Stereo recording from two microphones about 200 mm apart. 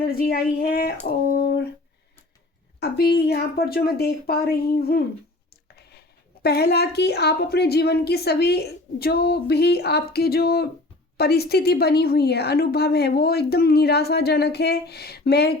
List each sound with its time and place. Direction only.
0.0 s a woman's voice: 50° left (ahead or behind)
1.4 s a sound: 55° left (ahead or behind)
2.8 s a woman's voice: 55° left (ahead or behind)